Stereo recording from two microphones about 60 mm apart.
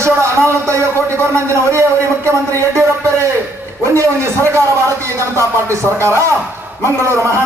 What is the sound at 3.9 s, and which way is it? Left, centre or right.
Speech, right.